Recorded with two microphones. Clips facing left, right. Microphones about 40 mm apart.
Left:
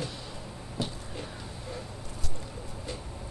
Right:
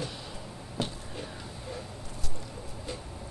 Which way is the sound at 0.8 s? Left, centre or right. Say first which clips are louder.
Right 1 dB; right.